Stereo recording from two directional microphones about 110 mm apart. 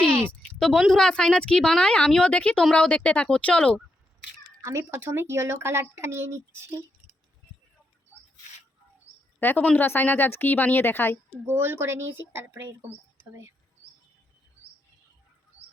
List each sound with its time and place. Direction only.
0.3 s a woman's voice: 5° left (ahead or behind)
4.6 s speech: 25° right (ahead or behind)
9.4 s speech: 15° left (ahead or behind)
11.4 s speech: 20° right (ahead or behind)